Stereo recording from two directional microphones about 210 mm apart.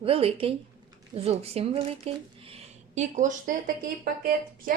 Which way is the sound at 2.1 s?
30° right (ahead or behind).